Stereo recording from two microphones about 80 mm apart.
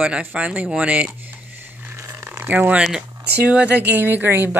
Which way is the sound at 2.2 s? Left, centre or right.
Right.